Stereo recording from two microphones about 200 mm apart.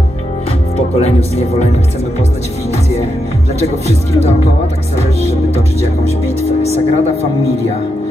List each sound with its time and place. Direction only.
0.7 s speech: 30° left (ahead or behind)
3.5 s speech: 35° left (ahead or behind)
6.2 s speech: 30° left (ahead or behind)